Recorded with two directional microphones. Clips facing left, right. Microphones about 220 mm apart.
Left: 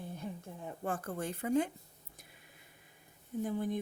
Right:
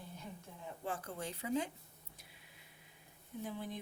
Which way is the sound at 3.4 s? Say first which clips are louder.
Left 8 dB; 50° left (ahead or behind).